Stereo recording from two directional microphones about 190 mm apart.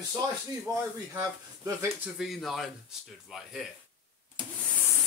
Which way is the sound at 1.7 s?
15° right (ahead or behind).